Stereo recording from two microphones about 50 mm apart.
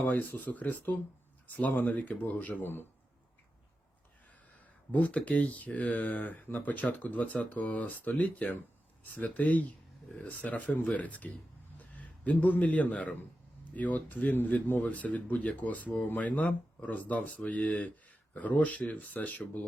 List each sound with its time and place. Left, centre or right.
0.0 s speech: left
4.9 s a man's voice: left